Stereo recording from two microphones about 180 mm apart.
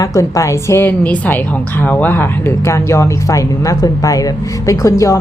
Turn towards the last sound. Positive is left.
turn(degrees=15)  # may be behind; listen again after turning